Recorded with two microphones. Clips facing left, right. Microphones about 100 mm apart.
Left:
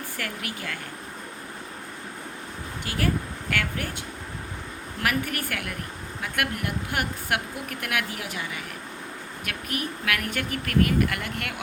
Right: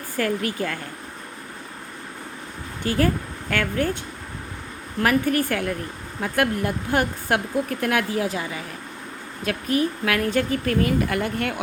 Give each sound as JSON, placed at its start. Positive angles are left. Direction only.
{"t": 0.2, "sound": "speech", "side_deg": -35}
{"t": 2.8, "sound": "speech", "side_deg": -40}
{"t": 5.0, "sound": "speech", "side_deg": -30}